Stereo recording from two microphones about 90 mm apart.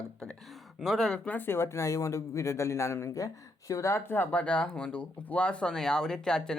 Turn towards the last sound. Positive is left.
turn(degrees=10)  # may be behind; listen again after turning